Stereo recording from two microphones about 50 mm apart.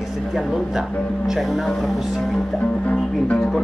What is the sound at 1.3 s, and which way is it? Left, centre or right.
Speech, centre.